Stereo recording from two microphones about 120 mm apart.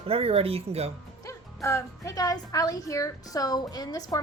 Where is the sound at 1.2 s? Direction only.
25° left (ahead or behind).